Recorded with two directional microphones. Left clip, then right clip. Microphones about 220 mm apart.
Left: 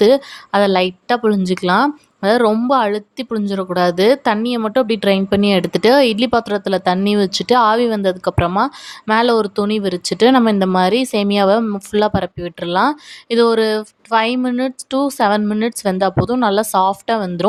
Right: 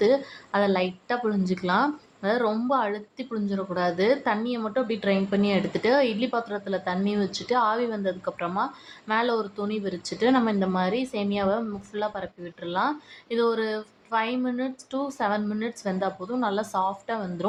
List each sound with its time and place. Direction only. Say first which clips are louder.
0.0 s a woman's voice: left 10 dB; 40° left (ahead or behind)